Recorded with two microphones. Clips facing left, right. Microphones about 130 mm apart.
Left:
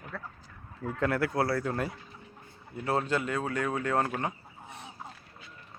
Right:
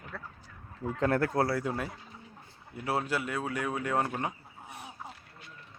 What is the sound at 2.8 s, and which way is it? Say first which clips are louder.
Speech: left 2 dB; 10° right (ahead or behind).